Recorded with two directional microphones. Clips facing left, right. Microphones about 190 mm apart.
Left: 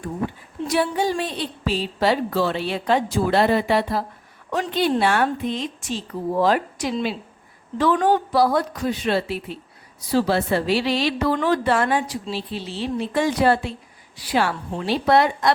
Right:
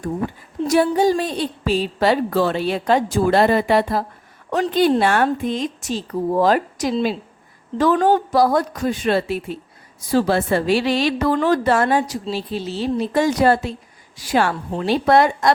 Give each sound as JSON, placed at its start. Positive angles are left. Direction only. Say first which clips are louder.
{"t": 0.7, "sound": "a woman's voice", "louder": "right 6 dB", "side_deg": -45}